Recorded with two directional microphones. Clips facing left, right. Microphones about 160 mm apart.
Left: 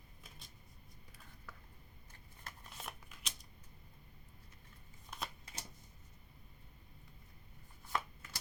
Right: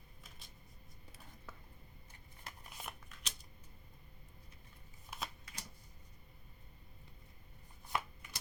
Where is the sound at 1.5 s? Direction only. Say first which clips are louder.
Right 1 dB; 25° right (ahead or behind).